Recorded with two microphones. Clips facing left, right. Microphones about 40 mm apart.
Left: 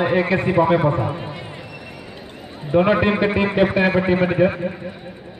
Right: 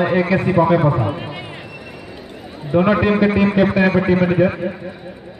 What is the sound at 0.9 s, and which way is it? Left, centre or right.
Speech, right.